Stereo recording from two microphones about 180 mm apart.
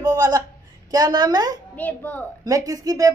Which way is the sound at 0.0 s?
20° right (ahead or behind).